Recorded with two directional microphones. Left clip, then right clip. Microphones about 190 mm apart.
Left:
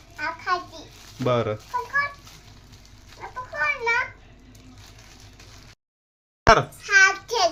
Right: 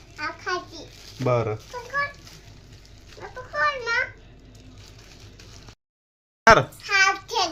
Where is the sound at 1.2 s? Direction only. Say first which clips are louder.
Even; 20° left (ahead or behind).